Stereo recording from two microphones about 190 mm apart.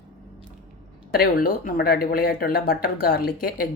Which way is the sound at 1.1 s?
50° left (ahead or behind).